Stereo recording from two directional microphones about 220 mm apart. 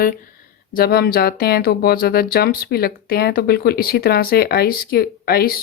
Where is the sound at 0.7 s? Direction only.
45° left (ahead or behind).